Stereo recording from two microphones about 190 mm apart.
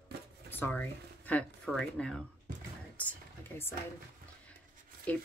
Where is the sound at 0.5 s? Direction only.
10° left (ahead or behind).